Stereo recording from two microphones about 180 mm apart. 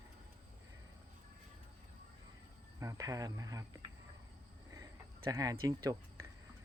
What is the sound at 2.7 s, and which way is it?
Speech, 20° right (ahead or behind).